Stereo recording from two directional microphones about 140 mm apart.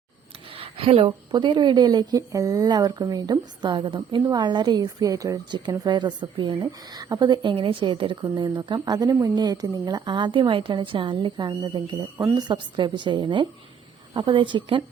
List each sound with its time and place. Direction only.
0.5 s a woman's voice: 40° right (ahead or behind)